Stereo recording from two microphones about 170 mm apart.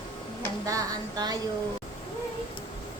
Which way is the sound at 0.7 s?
20° right (ahead or behind).